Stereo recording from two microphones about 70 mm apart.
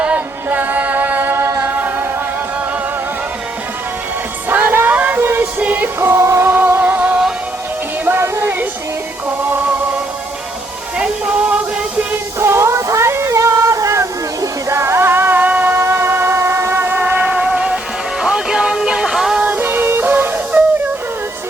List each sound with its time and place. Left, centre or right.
0.0 s a capella: right
1.7 s music: right
4.4 s music: right
5.5 s music: right
9.4 s music: right
10.9 s music: centre
12.4 s a sound: right; by 17.7 s centre
18.2 s music: centre
19.5 s music: right